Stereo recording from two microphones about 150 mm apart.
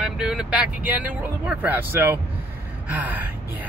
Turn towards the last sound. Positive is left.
turn(degrees=-10)  # may be behind; listen again after turning